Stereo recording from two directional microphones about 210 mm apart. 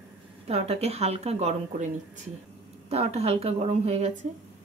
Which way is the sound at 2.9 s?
30° right (ahead or behind).